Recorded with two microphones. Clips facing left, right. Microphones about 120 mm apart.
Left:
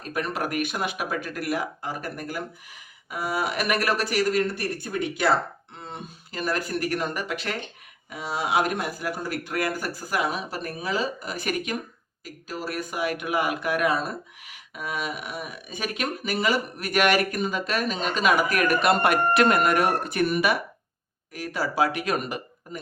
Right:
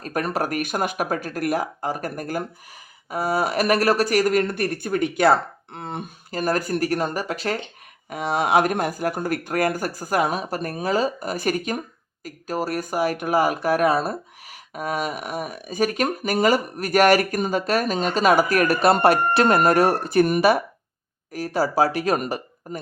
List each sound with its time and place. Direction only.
0.0 s speech: 45° right (ahead or behind); by 6.0 s 60° right (ahead or behind)
6.3 s speech: 45° right (ahead or behind)
8.1 s speech: 55° right (ahead or behind); by 22.8 s 40° right (ahead or behind)